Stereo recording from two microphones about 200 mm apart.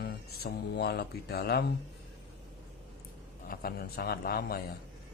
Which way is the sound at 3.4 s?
50° left (ahead or behind).